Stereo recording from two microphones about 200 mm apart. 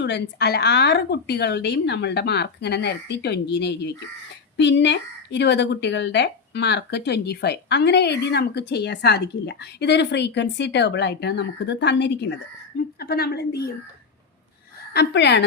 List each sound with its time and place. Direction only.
0.0 s a woman's voice: 55° left (ahead or behind)
14.9 s a woman's voice: 55° left (ahead or behind)